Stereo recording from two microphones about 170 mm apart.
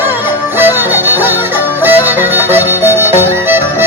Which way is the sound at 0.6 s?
10° right (ahead or behind).